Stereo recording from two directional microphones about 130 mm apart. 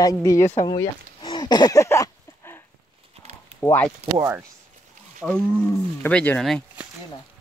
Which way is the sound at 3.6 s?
15° left (ahead or behind).